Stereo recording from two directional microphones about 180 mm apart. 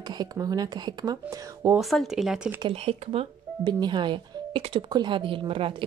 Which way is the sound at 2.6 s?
30° right (ahead or behind).